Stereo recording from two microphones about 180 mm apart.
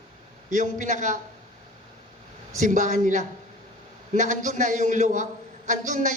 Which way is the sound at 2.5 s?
45° right (ahead or behind).